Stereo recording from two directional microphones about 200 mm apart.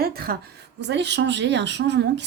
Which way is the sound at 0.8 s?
60° right (ahead or behind).